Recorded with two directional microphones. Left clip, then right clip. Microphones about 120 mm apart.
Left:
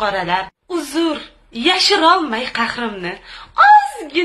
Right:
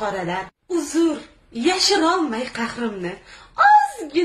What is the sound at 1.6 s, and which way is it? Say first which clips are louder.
A woman's voice: left 5 dB; 15° right (ahead or behind).